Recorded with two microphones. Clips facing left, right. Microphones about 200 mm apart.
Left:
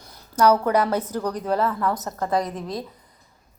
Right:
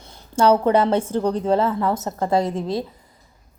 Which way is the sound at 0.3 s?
25° right (ahead or behind).